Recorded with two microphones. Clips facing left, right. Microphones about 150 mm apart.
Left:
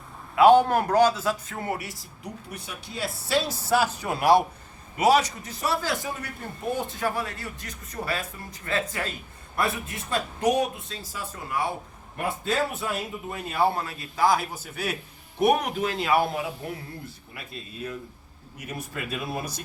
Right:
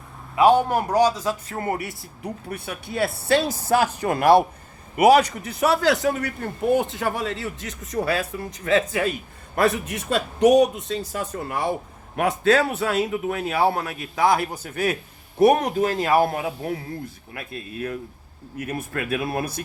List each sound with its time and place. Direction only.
0.3 s a man's voice: 15° right (ahead or behind)
1.5 s a man's voice: 60° right (ahead or behind)
12.1 s a man's voice: 85° right; by 14.3 s 65° right (ahead or behind)
14.5 s speech: 55° right (ahead or behind)
15.5 s speech: 40° right (ahead or behind)
17.3 s speech: 55° right (ahead or behind)